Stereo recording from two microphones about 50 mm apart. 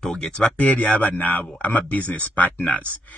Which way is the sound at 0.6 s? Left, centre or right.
Left.